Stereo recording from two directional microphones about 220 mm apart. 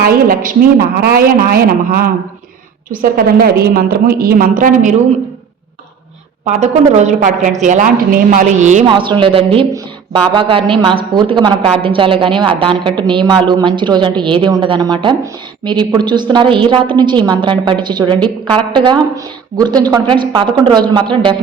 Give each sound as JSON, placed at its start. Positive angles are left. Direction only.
{"t": 0.0, "sound": "a woman's voice", "side_deg": -40}
{"t": 6.4, "sound": "a woman's voice", "side_deg": -30}